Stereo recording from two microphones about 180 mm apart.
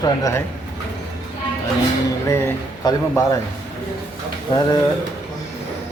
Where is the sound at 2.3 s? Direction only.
15° left (ahead or behind).